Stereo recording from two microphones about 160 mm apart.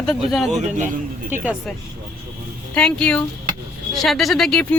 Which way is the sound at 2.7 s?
5° left (ahead or behind).